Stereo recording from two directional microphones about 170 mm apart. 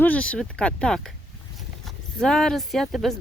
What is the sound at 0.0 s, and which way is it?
Speech, 10° left (ahead or behind).